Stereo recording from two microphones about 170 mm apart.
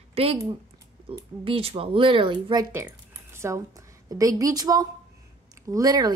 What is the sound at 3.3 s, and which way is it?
A woman's voice, 15° right (ahead or behind).